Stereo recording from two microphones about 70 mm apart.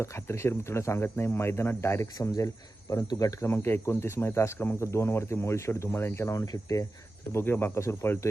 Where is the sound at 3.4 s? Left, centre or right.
Left.